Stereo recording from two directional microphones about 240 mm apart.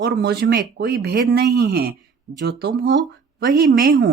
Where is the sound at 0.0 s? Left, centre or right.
Right.